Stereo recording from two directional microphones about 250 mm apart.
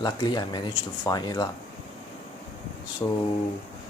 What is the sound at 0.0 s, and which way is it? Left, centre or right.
Speech, centre.